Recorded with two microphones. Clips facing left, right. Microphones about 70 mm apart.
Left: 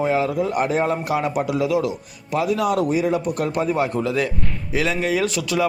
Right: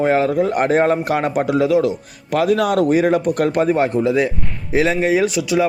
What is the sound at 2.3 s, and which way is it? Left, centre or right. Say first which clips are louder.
A man's voice: right 4 dB; right.